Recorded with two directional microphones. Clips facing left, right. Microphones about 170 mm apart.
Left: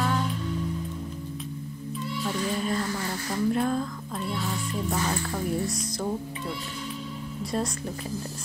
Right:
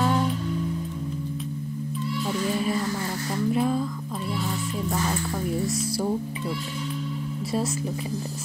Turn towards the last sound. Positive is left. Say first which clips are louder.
# right 2 dB
turn(degrees=-5)  # may be behind; listen again after turning